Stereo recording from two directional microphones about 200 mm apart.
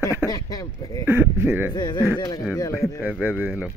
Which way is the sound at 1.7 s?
20° left (ahead or behind).